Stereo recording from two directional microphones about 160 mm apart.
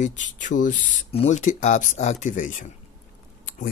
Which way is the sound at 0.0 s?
50° left (ahead or behind).